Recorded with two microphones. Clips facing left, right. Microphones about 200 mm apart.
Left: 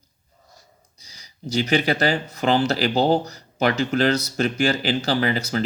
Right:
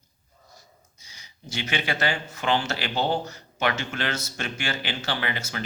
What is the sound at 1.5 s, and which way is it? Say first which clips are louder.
Speech: left 9 dB; 35° left (ahead or behind).